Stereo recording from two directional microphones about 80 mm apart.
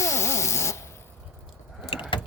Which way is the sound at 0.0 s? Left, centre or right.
Left.